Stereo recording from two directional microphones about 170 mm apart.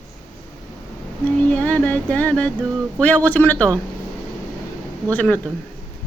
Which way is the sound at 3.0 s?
10° left (ahead or behind).